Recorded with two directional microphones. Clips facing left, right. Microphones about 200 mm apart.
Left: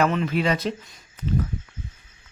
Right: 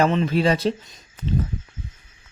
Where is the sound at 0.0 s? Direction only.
30° right (ahead or behind).